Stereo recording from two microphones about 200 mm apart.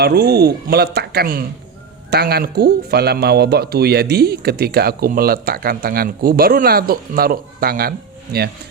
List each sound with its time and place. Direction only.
0.0 s speech: 55° right (ahead or behind)